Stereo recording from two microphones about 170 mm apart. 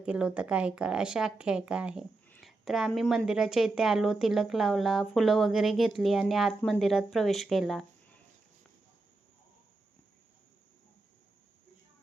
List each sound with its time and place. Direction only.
0.0 s speech: 5° right (ahead or behind)